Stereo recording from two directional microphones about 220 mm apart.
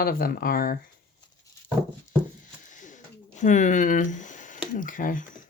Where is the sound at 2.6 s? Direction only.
35° left (ahead or behind).